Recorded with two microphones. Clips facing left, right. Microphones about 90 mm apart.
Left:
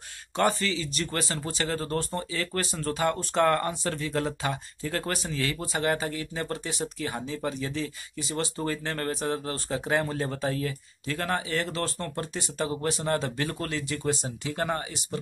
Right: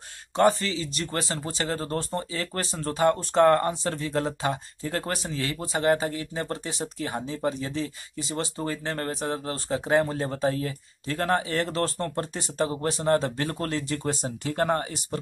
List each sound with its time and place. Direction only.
0.4 s speech: 25° right (ahead or behind); by 15.1 s 45° right (ahead or behind)